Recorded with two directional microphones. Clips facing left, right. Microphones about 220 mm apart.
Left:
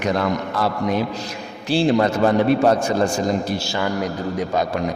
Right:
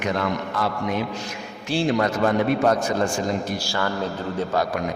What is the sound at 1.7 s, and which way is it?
Mantra, 35° left (ahead or behind).